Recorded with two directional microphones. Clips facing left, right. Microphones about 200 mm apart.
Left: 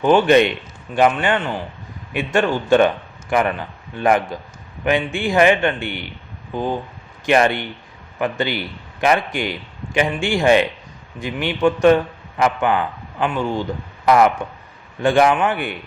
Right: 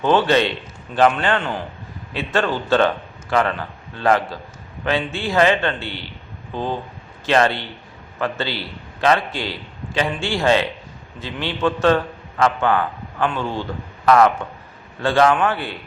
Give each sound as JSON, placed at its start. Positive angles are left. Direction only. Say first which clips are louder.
{"t": 0.0, "sound": "a man's voice", "louder": "left 3 dB", "side_deg": 15}